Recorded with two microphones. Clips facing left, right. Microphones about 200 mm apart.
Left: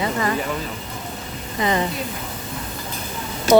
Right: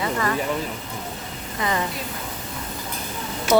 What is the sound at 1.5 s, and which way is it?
Speech, 20° left (ahead or behind).